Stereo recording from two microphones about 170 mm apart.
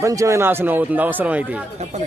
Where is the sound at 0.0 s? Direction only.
20° right (ahead or behind).